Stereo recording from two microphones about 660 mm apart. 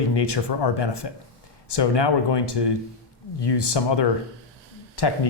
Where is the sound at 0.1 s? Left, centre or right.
Left.